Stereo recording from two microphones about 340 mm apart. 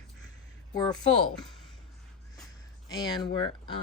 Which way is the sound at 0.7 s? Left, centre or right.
Centre.